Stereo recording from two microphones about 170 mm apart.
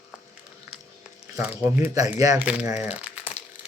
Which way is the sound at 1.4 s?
15° right (ahead or behind).